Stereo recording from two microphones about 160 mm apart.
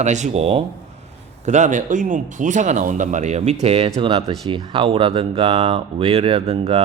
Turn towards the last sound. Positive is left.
turn(degrees=-35)  # may be behind; listen again after turning